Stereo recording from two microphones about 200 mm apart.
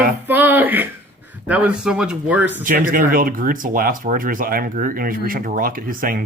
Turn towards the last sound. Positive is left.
turn(degrees=-45)  # may be behind; listen again after turning